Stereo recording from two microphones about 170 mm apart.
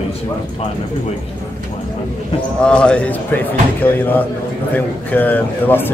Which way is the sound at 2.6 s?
5° left (ahead or behind).